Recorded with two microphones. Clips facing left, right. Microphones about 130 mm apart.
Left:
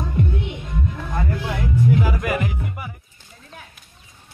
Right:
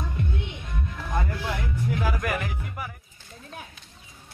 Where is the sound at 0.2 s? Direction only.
15° left (ahead or behind).